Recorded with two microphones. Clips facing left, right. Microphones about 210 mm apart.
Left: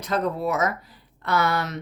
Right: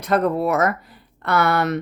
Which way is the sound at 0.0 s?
60° right (ahead or behind).